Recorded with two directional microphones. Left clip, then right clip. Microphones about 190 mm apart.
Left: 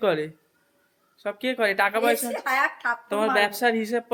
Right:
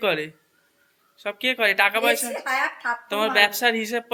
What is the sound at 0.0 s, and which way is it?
Speech, 25° left (ahead or behind).